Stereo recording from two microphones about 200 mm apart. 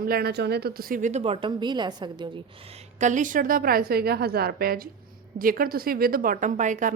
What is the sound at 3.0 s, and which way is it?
A woman's voice, 40° right (ahead or behind).